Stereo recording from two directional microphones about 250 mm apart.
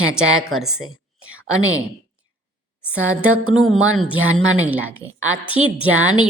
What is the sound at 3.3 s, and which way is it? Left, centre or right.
Speech, right.